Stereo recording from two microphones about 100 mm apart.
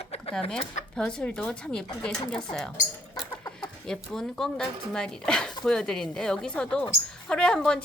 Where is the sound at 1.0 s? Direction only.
5° left (ahead or behind).